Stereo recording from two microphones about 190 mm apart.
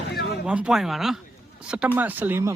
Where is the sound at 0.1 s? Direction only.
55° left (ahead or behind).